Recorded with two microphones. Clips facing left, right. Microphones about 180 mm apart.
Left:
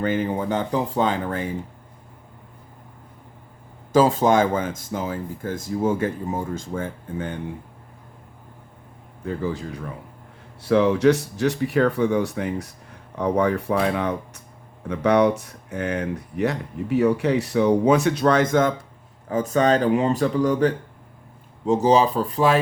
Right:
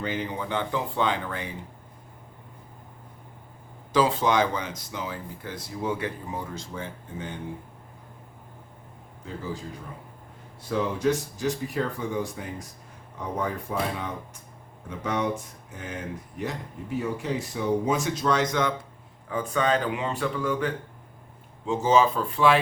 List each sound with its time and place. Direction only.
0.0 s speech: 50° left (ahead or behind)
3.9 s speech: 45° left (ahead or behind)
9.2 s speech: 65° left (ahead or behind); by 22.5 s 40° left (ahead or behind)